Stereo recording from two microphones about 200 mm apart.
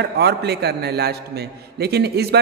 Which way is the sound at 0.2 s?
55° right (ahead or behind).